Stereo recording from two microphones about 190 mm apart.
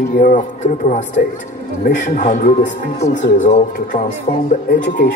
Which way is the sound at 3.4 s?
40° left (ahead or behind).